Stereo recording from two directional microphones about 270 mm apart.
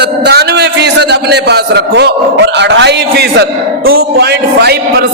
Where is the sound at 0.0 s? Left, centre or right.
Right.